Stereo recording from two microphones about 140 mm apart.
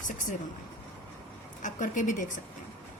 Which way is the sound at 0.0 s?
65° left (ahead or behind).